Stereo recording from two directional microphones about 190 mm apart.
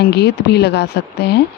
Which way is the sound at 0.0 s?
60° left (ahead or behind).